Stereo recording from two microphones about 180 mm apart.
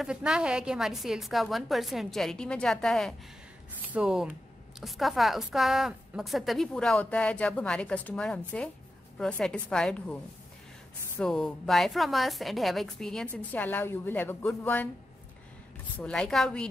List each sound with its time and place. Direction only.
0.0 s a woman's voice: 5° right (ahead or behind)
11.1 s a woman's voice: centre (ahead or behind)
16.0 s a woman's voice: 5° left (ahead or behind)